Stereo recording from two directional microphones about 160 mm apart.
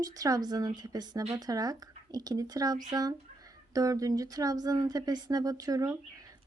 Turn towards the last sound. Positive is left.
turn(degrees=-20)  # may be behind; listen again after turning